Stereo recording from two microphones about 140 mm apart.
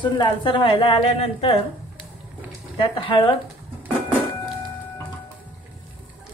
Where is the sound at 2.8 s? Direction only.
35° left (ahead or behind).